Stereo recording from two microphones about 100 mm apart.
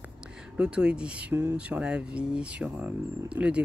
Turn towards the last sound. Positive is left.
turn(degrees=-10)  # may be behind; listen again after turning